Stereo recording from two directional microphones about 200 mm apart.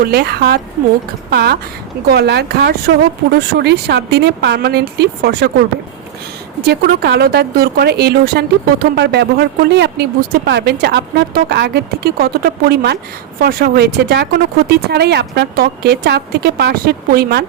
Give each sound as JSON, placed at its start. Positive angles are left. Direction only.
{"t": 0.0, "sound": "speech", "side_deg": -50}
{"t": 6.7, "sound": "speech", "side_deg": -50}